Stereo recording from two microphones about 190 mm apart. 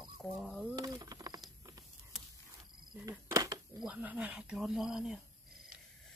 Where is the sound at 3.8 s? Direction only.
5° right (ahead or behind).